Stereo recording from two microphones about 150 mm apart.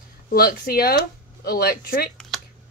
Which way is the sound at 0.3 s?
90° left.